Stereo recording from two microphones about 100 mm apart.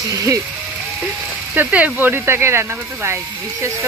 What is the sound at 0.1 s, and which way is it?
Speech, 35° right (ahead or behind).